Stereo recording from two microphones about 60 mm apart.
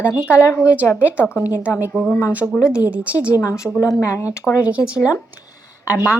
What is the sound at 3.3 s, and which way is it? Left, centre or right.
Speech, left.